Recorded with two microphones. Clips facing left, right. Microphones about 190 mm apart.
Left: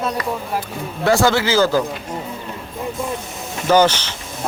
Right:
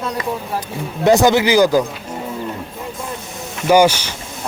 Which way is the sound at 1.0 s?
20° right (ahead or behind).